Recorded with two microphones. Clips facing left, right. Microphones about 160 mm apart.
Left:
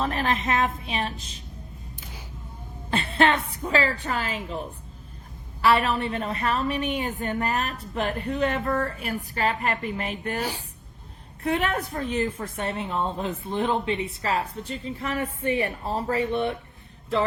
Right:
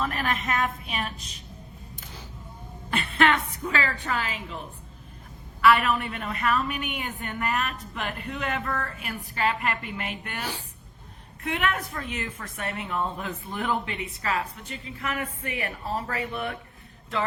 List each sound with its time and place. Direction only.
0.0 s a woman's voice: 30° left (ahead or behind)
2.9 s a woman's voice: 30° left (ahead or behind)
5.6 s a woman's voice: 30° left (ahead or behind)
11.4 s a woman's voice: 35° left (ahead or behind)